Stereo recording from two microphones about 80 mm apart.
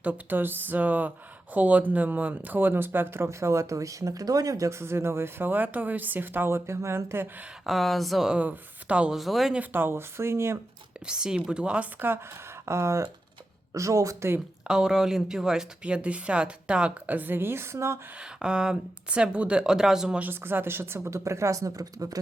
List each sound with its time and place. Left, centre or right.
0.0 s speech: right
7.6 s speech: centre
8.4 s speech: centre
9.1 s speech: centre
9.6 s speech: right
11.0 s speech: centre
11.9 s speech: right
14.7 s speech: centre; by 18.0 s right
18.2 s speech: centre
20.1 s speech: right